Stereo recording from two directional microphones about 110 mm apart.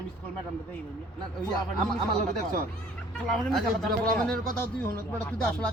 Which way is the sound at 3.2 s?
5° left (ahead or behind).